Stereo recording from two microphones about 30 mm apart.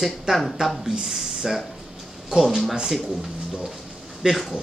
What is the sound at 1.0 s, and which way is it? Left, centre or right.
Speech, centre.